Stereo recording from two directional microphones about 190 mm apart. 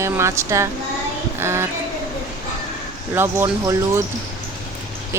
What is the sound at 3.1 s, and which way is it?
Speech, 10° right (ahead or behind).